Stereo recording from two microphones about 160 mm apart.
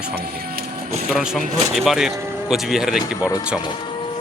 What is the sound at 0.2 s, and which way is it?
Printer, 70° right (ahead or behind).